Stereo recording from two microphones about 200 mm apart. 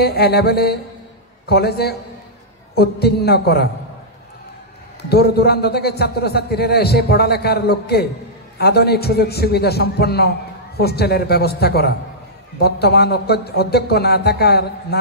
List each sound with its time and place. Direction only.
0.0 s a man's voice: 50° left (ahead or behind)
5.1 s a man's voice: 50° left (ahead or behind)